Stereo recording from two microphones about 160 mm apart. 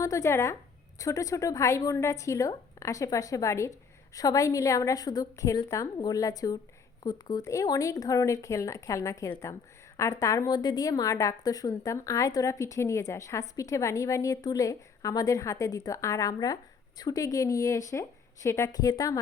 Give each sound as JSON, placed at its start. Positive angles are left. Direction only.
{"t": 0.0, "sound": "a woman's voice", "side_deg": 20}